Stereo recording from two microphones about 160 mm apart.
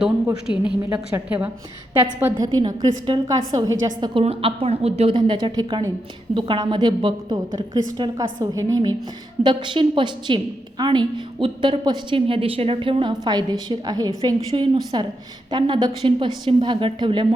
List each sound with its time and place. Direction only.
0.8 s a woman's voice: 10° right (ahead or behind)
4.2 s a woman's voice: 35° right (ahead or behind)